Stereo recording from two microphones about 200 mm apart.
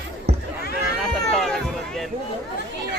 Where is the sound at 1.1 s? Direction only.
Centre (ahead or behind).